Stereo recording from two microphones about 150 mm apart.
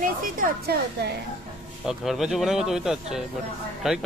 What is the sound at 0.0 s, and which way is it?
Speech, 80° right.